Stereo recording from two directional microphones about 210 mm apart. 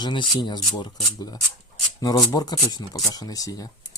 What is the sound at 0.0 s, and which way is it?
Speech, 20° left (ahead or behind).